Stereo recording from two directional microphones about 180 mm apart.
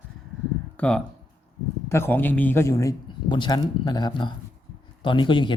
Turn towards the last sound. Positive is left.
turn(degrees=25)  # may be behind; listen again after turning